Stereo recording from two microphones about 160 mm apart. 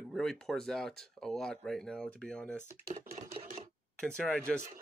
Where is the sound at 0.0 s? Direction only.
Centre (ahead or behind).